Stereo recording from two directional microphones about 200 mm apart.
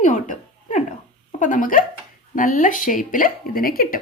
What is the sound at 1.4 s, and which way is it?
Speech, 40° left (ahead or behind).